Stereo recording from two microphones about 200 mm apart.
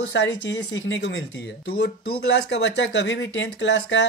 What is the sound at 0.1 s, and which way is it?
Speech, 65° left (ahead or behind).